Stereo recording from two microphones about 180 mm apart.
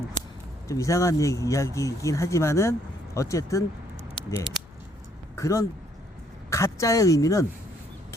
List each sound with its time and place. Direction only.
0.7 s speech: 15° left (ahead or behind)
4.1 s a sound: 15° left (ahead or behind)
5.4 s speech: 15° left (ahead or behind)